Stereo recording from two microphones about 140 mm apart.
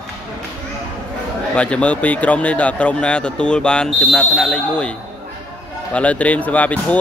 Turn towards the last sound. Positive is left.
turn(degrees=10)  # may be behind; listen again after turning